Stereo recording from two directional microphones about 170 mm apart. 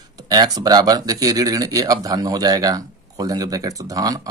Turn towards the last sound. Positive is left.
turn(degrees=-20)  # may be behind; listen again after turning